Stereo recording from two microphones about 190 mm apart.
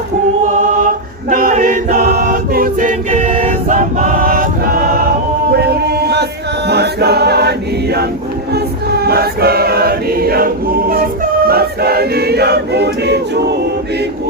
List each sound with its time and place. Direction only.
0.6 s choir: 45° right (ahead or behind)
6.7 s music: 60° right (ahead or behind)
8.5 s choir: 55° right (ahead or behind)